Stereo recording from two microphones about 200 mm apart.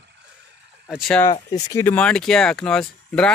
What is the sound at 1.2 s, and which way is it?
Speech, 20° left (ahead or behind).